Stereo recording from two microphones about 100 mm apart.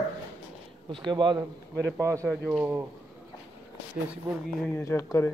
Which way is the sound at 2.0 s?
30° right (ahead or behind).